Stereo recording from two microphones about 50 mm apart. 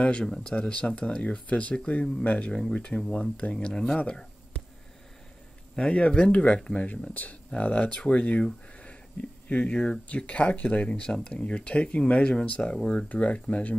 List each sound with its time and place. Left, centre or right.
0.2 s speech: centre
5.8 s speech: left
9.5 s speech: left